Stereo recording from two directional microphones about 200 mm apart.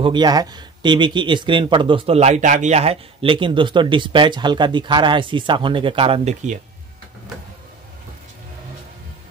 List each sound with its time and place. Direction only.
0.0 s a man's voice: 20° right (ahead or behind)